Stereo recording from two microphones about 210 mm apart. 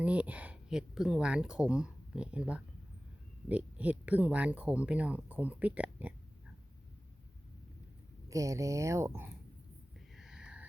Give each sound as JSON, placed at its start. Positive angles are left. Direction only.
{"t": 0.0, "sound": "speech", "side_deg": -5}
{"t": 8.3, "sound": "speech", "side_deg": -15}
{"t": 10.2, "sound": "a sound", "side_deg": -5}